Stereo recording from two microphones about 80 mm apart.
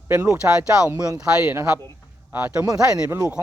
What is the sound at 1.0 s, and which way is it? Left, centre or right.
Speech, right.